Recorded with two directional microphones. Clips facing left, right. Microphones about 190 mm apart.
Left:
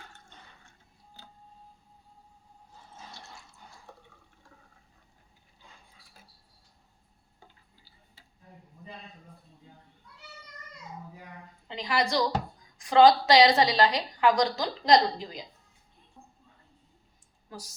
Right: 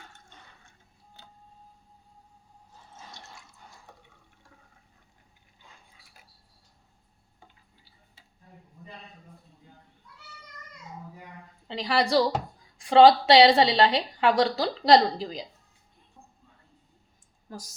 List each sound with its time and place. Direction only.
11.7 s a woman's voice: 30° right (ahead or behind)